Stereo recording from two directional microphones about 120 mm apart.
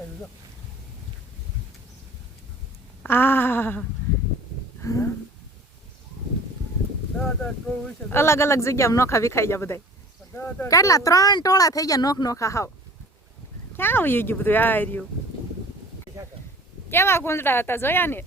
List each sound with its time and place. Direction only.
3.0 s speech: 15° left (ahead or behind)
4.8 s a sound: 25° left (ahead or behind)
7.2 s speech: 5° left (ahead or behind)
8.1 s speech: 20° left (ahead or behind)
10.7 s speech: 25° left (ahead or behind)
13.7 s speech: 20° left (ahead or behind)
16.1 s a sound: 25° right (ahead or behind)
16.9 s speech: 20° left (ahead or behind)